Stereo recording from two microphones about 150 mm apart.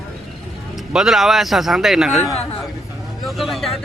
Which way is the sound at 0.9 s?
Centre (ahead or behind).